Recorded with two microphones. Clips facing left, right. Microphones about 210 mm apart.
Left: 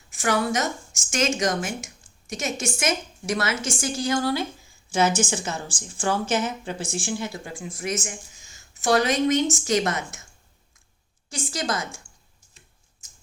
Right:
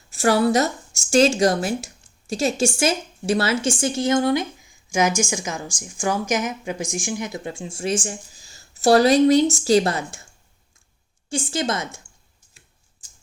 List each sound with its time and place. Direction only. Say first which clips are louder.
0.1 s a woman's voice: right 6 dB; 35° right (ahead or behind)
11.3 s speech: right 4 dB; 25° right (ahead or behind)
13.0 s tick-tock: even; 30° right (ahead or behind)